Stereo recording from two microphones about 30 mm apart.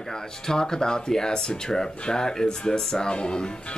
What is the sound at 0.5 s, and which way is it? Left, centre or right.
Speech, left.